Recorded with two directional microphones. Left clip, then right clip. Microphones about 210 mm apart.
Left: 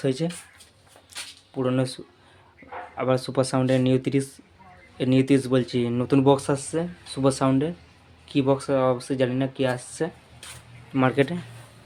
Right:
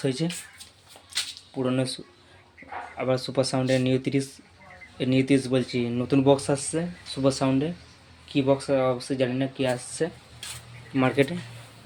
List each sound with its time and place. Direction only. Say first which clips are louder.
0.0 s speech: left 2 dB; 10° left (ahead or behind)
1.5 s speech: left 2 dB; 10° left (ahead or behind)
3.0 s speech: left 2 dB; 15° left (ahead or behind)